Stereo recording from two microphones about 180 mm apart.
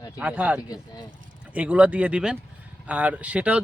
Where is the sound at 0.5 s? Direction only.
20° left (ahead or behind).